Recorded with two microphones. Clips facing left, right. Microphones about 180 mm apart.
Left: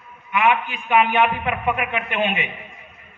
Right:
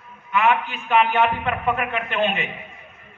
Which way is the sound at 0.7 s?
10° left (ahead or behind).